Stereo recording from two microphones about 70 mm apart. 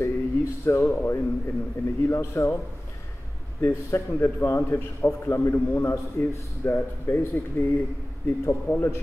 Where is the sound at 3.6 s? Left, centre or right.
Left.